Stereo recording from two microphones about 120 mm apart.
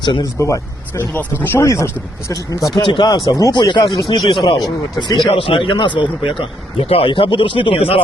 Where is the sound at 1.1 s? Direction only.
15° left (ahead or behind).